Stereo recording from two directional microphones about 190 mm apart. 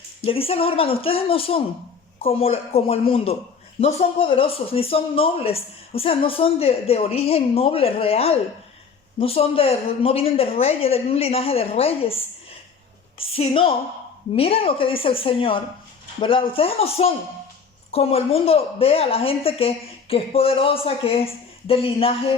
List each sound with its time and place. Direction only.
0.3 s a woman's voice: 30° left (ahead or behind)